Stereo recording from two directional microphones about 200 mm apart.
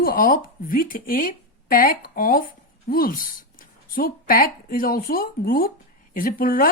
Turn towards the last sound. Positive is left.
turn(degrees=45)  # may be behind; listen again after turning